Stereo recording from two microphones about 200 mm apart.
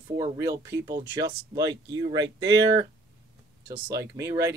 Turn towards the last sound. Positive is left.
turn(degrees=-15)  # may be behind; listen again after turning